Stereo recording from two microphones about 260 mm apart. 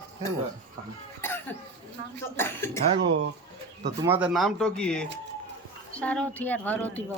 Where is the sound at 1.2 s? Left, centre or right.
Centre.